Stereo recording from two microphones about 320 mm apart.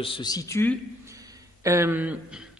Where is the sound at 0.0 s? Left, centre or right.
Centre.